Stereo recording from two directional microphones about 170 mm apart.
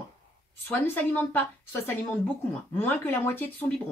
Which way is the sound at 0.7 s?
10° left (ahead or behind).